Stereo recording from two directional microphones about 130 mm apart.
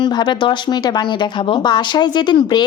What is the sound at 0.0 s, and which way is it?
Speech, 35° left (ahead or behind).